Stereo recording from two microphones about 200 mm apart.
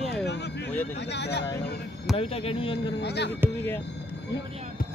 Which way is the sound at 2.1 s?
30° left (ahead or behind).